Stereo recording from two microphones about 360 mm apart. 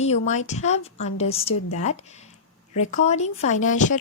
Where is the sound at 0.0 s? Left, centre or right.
Centre.